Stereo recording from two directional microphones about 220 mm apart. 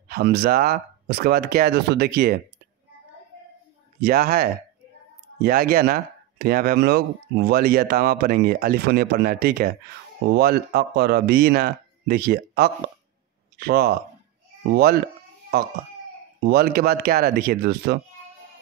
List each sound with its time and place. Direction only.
0.1 s speech: 45° right (ahead or behind)
4.0 s speech: 45° right (ahead or behind)